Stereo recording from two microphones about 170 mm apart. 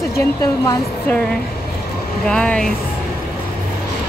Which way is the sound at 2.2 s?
5° left (ahead or behind).